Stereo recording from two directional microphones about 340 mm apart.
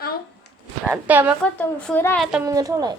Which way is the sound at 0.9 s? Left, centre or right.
Centre.